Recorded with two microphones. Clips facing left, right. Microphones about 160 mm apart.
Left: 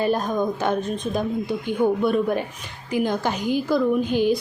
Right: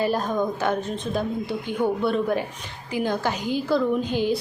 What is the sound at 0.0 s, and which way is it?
A woman's voice, 20° left (ahead or behind).